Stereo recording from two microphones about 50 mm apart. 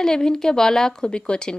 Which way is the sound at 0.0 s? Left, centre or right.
Centre.